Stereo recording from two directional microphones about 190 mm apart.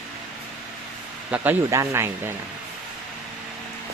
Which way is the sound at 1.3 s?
10° right (ahead or behind).